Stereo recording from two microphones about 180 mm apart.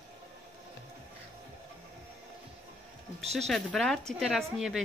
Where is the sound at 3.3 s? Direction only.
Centre (ahead or behind).